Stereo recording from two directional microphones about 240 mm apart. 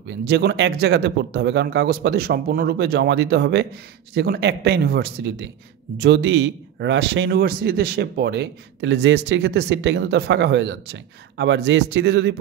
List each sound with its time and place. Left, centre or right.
0.3 s a man's voice: right